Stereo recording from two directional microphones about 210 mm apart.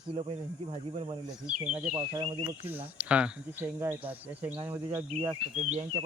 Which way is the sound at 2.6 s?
10° right (ahead or behind).